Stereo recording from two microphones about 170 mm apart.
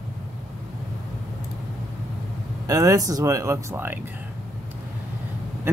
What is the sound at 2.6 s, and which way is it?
Speech, 20° right (ahead or behind).